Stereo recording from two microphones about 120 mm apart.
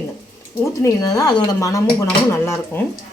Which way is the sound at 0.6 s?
25° left (ahead or behind).